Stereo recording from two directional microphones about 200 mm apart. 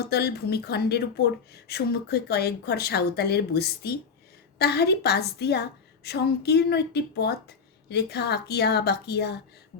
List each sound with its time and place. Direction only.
0.0 s a woman's voice: 55° left (ahead or behind)